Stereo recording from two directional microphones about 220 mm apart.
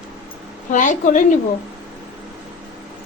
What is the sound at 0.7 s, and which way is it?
Speech, 35° left (ahead or behind).